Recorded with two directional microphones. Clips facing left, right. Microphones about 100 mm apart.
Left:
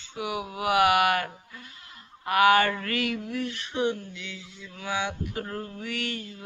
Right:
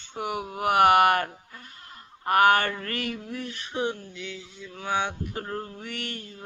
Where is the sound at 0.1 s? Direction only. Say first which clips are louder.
Right 1 dB; 45° right (ahead or behind).